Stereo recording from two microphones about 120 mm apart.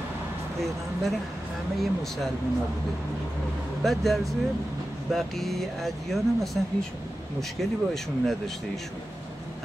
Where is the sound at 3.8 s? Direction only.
Centre (ahead or behind).